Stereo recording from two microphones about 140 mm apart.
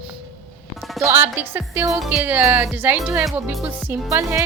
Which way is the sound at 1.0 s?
15° right (ahead or behind).